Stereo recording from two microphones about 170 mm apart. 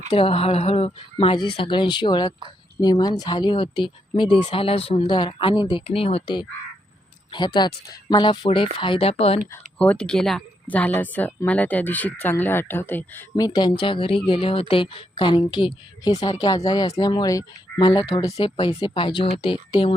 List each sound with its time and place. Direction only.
0.1 s speech: 35° left (ahead or behind)
9.7 s speech: 10° left (ahead or behind)
13.3 s speech: 25° left (ahead or behind)